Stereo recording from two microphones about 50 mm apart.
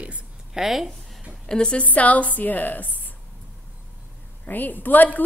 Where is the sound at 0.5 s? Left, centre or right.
Centre.